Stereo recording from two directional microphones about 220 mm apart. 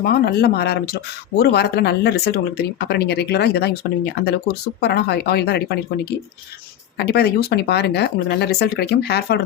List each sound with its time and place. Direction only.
0.0 s speech: 45° left (ahead or behind)